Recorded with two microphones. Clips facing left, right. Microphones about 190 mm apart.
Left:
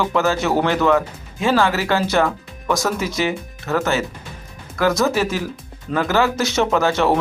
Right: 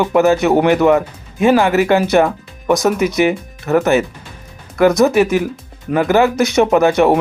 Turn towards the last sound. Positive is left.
turn(degrees=-15)  # may be behind; listen again after turning